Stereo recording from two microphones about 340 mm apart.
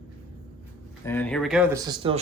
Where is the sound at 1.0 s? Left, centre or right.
Centre.